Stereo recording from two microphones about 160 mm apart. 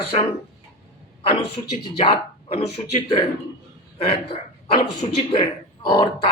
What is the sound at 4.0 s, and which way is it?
Speech, 40° left (ahead or behind).